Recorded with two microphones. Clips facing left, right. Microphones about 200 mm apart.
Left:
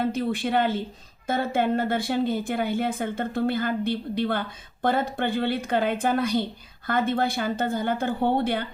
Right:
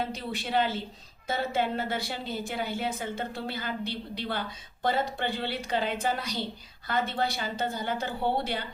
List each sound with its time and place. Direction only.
0.0 s a woman's voice: 50° left (ahead or behind)